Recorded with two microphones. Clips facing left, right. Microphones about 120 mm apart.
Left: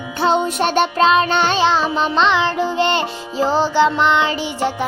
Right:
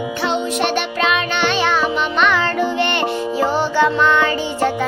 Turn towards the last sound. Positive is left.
turn(degrees=20)  # may be behind; listen again after turning